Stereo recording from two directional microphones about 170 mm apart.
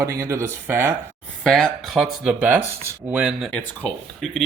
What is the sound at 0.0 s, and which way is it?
Speech, 15° right (ahead or behind).